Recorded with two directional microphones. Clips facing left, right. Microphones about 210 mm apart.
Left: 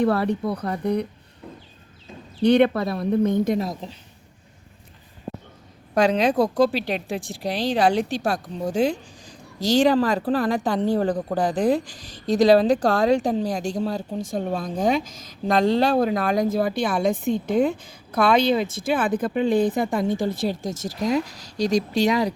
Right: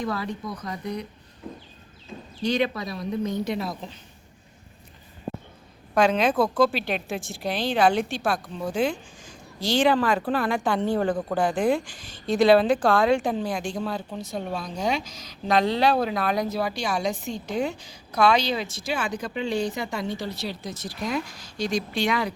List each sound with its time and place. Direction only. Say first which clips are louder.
0.0 s speech: left 9 dB; 60° left (ahead or behind)
2.4 s speech: left 8 dB; 60° left (ahead or behind); by 3.9 s 35° left (ahead or behind)
5.9 s a woman's voice: left 2 dB; 40° left (ahead or behind)